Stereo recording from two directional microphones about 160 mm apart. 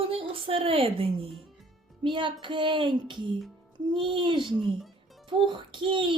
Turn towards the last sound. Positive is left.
turn(degrees=-30)  # may be behind; listen again after turning